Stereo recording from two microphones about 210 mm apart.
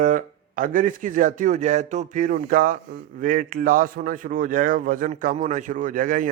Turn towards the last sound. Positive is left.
turn(degrees=-40)  # may be behind; listen again after turning